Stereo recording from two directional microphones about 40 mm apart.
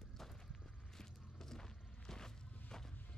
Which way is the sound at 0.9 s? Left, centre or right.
Centre.